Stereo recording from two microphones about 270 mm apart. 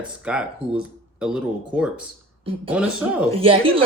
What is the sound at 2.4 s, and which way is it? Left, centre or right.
A woman's voice, centre.